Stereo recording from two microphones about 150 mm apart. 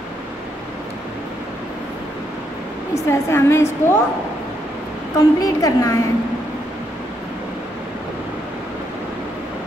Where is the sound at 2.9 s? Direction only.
20° left (ahead or behind).